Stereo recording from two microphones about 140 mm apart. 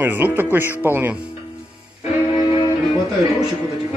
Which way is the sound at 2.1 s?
10° right (ahead or behind).